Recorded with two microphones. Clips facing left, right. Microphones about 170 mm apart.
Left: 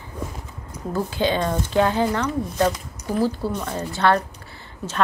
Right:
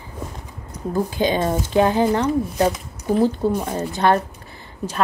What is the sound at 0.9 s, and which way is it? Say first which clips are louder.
A woman's voice: right 2 dB; 15° right (ahead or behind).